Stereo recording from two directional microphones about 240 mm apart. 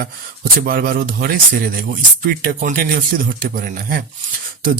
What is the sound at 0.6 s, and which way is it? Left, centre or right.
Speech, right.